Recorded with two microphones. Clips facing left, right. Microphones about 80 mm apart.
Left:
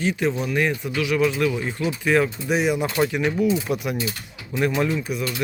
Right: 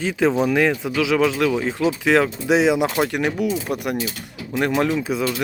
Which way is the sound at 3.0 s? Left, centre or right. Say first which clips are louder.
Left 1 dB; right.